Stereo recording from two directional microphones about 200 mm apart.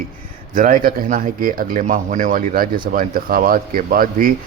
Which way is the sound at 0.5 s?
40° right (ahead or behind).